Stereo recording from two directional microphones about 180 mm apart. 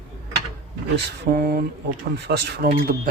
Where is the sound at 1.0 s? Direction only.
65° right (ahead or behind).